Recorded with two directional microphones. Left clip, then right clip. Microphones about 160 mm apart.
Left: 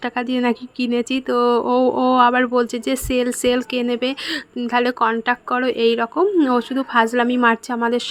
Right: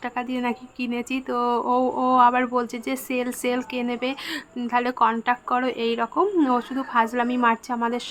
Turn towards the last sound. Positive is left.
turn(degrees=30)  # may be behind; listen again after turning